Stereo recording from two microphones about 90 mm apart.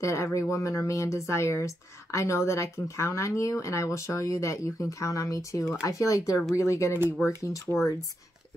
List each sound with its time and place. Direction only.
0.0 s a woman's voice: 35° left (ahead or behind)
7.7 s speech: 5° right (ahead or behind)